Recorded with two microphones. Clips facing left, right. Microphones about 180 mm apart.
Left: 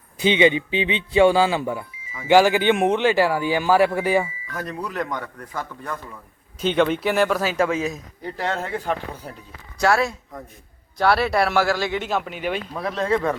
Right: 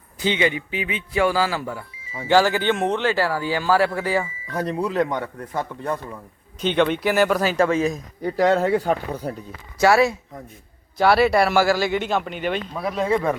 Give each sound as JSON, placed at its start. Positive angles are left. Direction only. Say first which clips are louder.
{"t": 0.2, "sound": "a man's voice", "louder": "left 4 dB", "side_deg": 20}
{"t": 4.4, "sound": "speech", "louder": "right 6 dB", "side_deg": -30}
{"t": 6.6, "sound": "speech", "louder": "even", "side_deg": 5}
{"t": 8.4, "sound": "speech", "louder": "right 9 dB", "side_deg": -40}
{"t": 9.7, "sound": "speech", "louder": "right 3 dB", "side_deg": -5}
{"t": 12.7, "sound": "speech", "louder": "even", "side_deg": -10}